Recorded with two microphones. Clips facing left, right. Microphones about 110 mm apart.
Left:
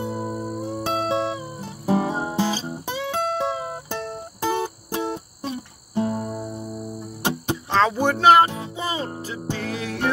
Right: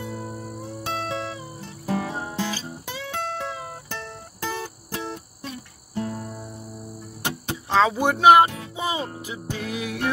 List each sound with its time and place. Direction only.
0.0 s music: 30° left (ahead or behind)
7.7 s speech: 5° right (ahead or behind)
8.7 s music: 15° right (ahead or behind)